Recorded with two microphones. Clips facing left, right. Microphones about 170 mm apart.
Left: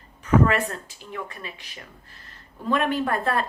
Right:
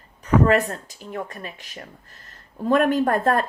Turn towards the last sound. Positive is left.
turn(degrees=-45)  # may be behind; listen again after turning